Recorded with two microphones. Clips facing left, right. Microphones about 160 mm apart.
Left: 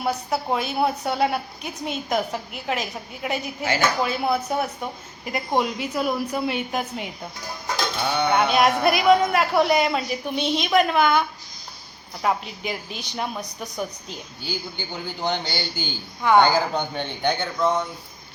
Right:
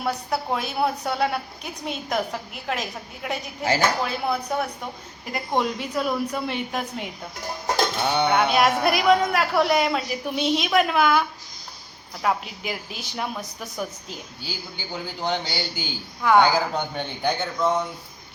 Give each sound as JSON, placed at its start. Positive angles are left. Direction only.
{"t": 0.0, "sound": "a woman's voice", "side_deg": 0}
{"t": 3.6, "sound": "speech", "side_deg": -35}
{"t": 4.0, "sound": "a woman's voice", "side_deg": 5}
{"t": 8.0, "sound": "a sound", "side_deg": -25}
{"t": 8.3, "sound": "a woman's voice", "side_deg": 0}